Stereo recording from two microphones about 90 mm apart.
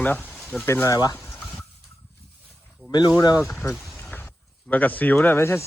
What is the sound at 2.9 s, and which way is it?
Speech, 50° left (ahead or behind).